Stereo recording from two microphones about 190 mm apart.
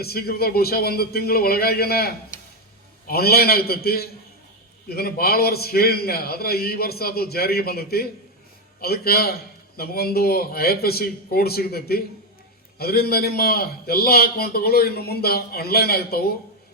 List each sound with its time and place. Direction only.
0.0 s a man's voice: 55° left (ahead or behind)